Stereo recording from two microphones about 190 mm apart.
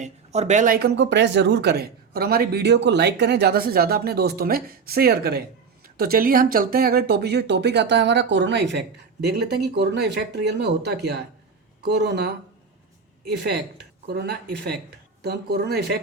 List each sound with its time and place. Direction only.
0.0 s speech: 35° right (ahead or behind); by 12.3 s 60° right (ahead or behind)
14.1 s speech: 55° right (ahead or behind)